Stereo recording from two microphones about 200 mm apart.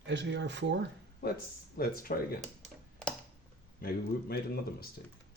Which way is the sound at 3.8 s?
50° left (ahead or behind).